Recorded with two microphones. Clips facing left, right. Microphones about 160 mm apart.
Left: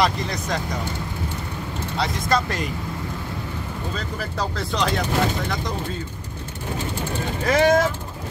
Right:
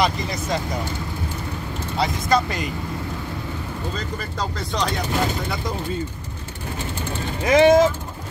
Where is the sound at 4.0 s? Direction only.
5° left (ahead or behind).